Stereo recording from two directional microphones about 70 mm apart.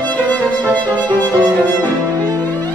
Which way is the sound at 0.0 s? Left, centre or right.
Left.